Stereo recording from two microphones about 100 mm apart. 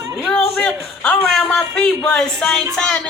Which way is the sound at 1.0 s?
5° left (ahead or behind).